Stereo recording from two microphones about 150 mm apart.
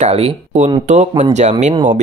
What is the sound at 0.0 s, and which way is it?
Speech, 45° right (ahead or behind).